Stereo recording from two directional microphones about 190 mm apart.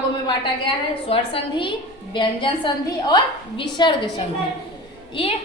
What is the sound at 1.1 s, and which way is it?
A woman's voice, 25° left (ahead or behind).